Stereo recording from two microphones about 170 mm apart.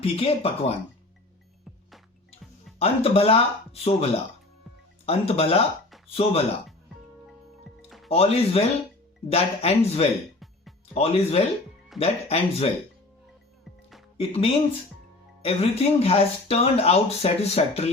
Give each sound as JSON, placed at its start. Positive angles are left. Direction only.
{"t": 0.0, "sound": "speech", "side_deg": 35}
{"t": 2.7, "sound": "speech", "side_deg": 35}
{"t": 5.0, "sound": "speech", "side_deg": 35}
{"t": 7.9, "sound": "music", "side_deg": 0}
{"t": 8.1, "sound": "speech", "side_deg": 35}
{"t": 14.2, "sound": "speech", "side_deg": 35}